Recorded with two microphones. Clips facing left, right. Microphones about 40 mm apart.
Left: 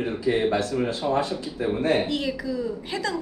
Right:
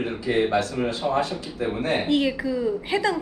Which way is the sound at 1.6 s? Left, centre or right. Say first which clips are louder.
Left 1 dB; right.